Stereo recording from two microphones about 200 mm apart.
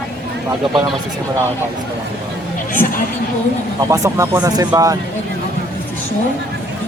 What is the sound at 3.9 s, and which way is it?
Speech, 15° right (ahead or behind).